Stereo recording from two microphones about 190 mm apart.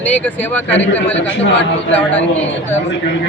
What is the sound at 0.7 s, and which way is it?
Speech, 75° left (ahead or behind).